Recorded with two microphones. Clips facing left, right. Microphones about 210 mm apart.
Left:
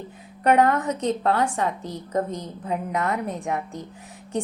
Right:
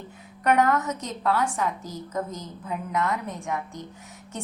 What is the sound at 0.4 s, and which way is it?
Speech, 30° left (ahead or behind).